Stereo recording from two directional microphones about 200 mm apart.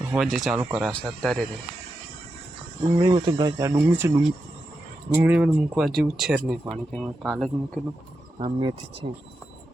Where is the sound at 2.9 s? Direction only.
20° right (ahead or behind); by 7.8 s centre (ahead or behind).